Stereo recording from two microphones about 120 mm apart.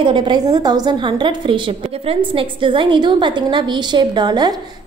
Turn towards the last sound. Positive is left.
turn(degrees=-35)  # may be behind; listen again after turning